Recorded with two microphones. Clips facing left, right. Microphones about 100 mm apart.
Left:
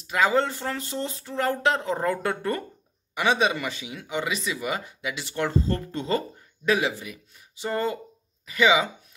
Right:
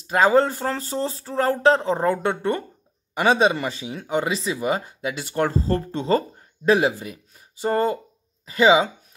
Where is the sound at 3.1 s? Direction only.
35° right (ahead or behind).